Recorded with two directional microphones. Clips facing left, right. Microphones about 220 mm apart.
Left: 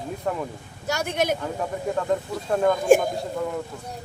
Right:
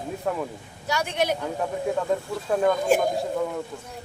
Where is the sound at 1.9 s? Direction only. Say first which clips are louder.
Left 3 dB; 5° right (ahead or behind).